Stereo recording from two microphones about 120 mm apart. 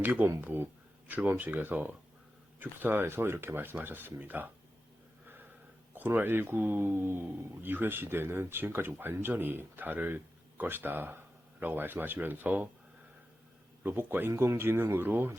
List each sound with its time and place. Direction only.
0.0 s speech: 15° right (ahead or behind)
5.9 s speech: 15° right (ahead or behind)
13.8 s speech: 15° right (ahead or behind)